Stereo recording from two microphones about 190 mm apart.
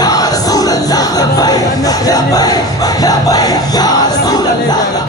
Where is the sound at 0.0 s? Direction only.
20° left (ahead or behind).